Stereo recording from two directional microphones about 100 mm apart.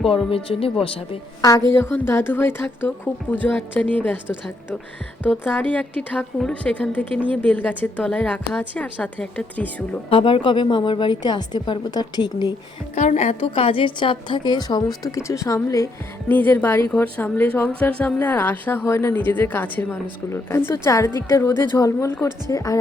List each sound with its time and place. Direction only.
0.3 s speech: 70° left (ahead or behind)
1.4 s speech: 35° left (ahead or behind)
1.7 s a woman's voice: 25° left (ahead or behind)
5.2 s a woman's voice: 20° left (ahead or behind)
10.1 s a woman's voice: 60° left (ahead or behind)
13.1 s a woman's voice: 80° left; by 22.8 s 35° left (ahead or behind)